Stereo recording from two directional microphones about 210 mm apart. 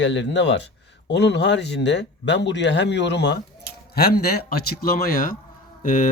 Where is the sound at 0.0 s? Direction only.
55° left (ahead or behind).